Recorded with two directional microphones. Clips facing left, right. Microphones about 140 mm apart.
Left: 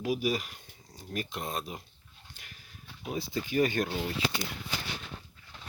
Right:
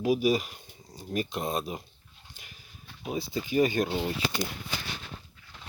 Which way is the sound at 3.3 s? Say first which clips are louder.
Right 3 dB; 20° right (ahead or behind).